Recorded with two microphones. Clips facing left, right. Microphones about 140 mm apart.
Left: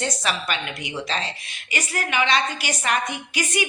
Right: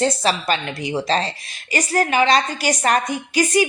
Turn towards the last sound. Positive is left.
turn(degrees=-35)  # may be behind; listen again after turning